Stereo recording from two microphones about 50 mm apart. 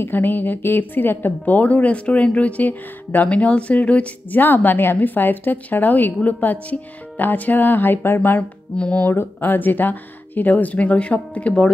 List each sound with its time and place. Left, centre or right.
0.0 s speech: left
4.4 s speech: left
8.4 s mantra: left
9.1 s speech: left